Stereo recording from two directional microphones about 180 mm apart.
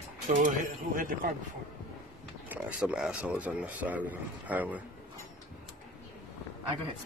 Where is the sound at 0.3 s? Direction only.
45° right (ahead or behind).